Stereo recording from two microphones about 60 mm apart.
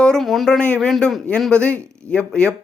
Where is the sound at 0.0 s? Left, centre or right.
Centre.